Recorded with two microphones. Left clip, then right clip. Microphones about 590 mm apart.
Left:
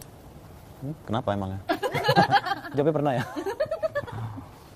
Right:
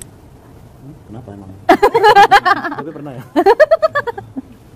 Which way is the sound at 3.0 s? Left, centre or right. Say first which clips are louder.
Left 5 dB; left.